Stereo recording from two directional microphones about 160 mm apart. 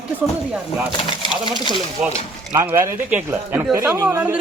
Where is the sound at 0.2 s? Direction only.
10° right (ahead or behind).